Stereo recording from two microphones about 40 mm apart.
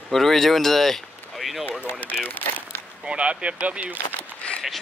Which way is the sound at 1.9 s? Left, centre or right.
Left.